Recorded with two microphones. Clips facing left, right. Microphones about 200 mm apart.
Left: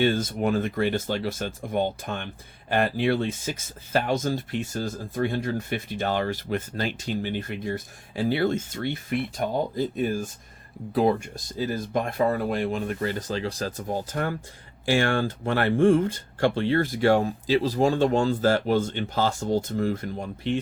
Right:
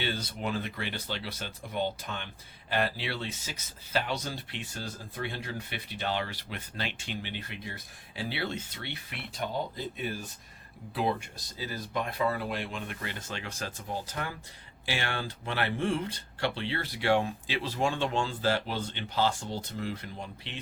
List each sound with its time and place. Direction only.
0.0 s speech: 45° left (ahead or behind)